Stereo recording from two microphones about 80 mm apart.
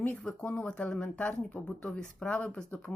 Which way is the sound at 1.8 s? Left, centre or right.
Centre.